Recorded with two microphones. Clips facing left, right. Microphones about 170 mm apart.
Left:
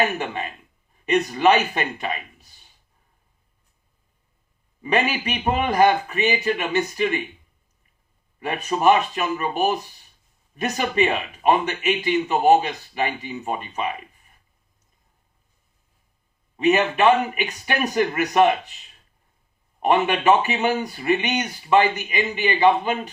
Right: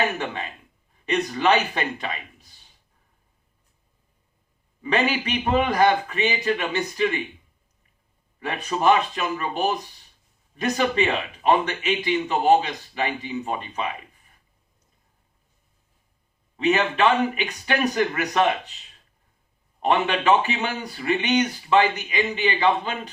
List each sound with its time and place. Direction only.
1.0 s a man's voice: 15° left (ahead or behind)
4.8 s a man's voice: 15° left (ahead or behind)
8.4 s a man's voice: 10° left (ahead or behind)
16.6 s a man's voice: 10° left (ahead or behind)
19.8 s a man's voice: 15° left (ahead or behind)